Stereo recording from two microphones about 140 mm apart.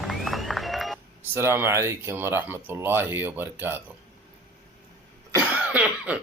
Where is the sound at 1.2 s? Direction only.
15° right (ahead or behind).